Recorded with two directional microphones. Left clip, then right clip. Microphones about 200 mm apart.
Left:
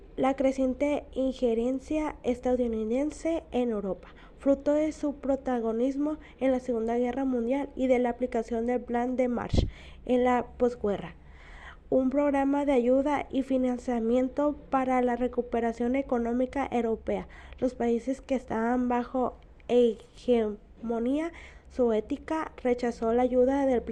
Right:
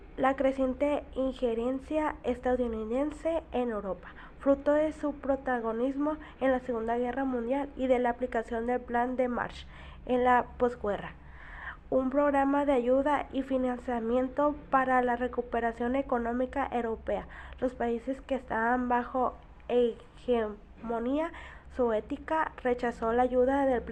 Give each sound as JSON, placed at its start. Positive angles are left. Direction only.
{"t": 0.2, "sound": "a woman's voice", "side_deg": 45}